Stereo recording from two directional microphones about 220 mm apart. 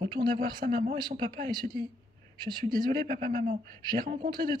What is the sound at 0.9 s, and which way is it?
Speech, 20° right (ahead or behind).